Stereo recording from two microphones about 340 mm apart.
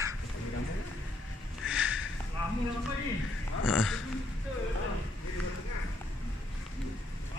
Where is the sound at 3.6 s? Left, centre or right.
Centre.